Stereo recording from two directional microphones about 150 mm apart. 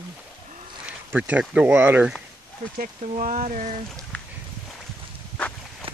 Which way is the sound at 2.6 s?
65° right (ahead or behind).